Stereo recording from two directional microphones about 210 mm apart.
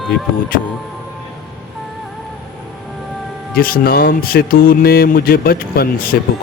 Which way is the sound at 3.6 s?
45° left (ahead or behind).